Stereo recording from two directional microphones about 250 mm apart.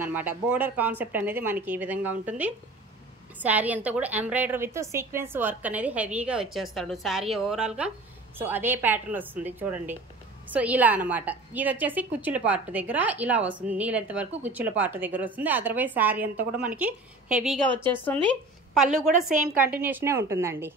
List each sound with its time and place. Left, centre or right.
0.0 s a woman's voice: centre
19.3 s a woman's voice: right
19.6 s a woman's voice: centre